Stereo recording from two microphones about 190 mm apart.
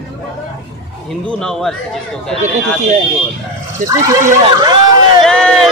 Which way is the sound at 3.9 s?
15° right (ahead or behind).